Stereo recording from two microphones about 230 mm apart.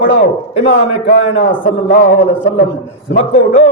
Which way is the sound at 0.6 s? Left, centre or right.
Left.